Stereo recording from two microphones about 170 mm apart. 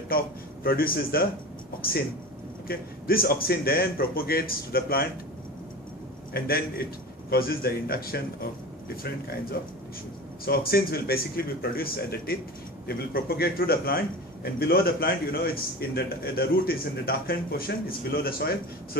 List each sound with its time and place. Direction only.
0.7 s a man's voice: 60° left (ahead or behind)
6.3 s a man's voice: 60° left (ahead or behind)